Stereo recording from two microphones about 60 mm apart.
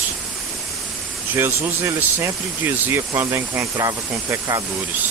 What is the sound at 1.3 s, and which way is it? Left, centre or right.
Speech, right.